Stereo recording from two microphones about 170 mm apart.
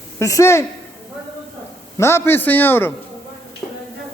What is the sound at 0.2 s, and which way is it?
Speech, 20° left (ahead or behind).